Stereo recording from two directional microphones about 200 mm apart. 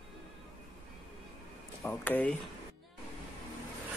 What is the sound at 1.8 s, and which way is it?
Speech, 10° left (ahead or behind).